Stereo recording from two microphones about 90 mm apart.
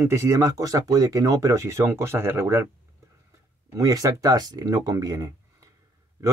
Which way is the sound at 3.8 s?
40° right (ahead or behind).